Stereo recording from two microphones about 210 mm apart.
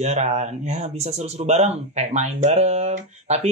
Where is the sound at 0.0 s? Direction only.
30° right (ahead or behind).